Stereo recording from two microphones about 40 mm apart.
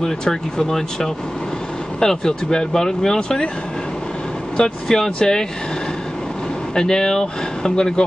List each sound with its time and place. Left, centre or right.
0.0 s speech: centre
4.8 s speech: centre
6.7 s speech: centre